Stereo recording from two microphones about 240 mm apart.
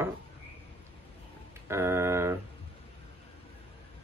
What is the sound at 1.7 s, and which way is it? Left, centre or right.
Speech, centre.